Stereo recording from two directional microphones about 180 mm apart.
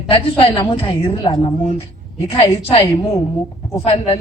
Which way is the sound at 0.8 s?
30° left (ahead or behind).